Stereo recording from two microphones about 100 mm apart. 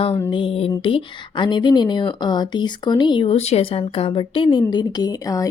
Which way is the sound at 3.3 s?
90° left.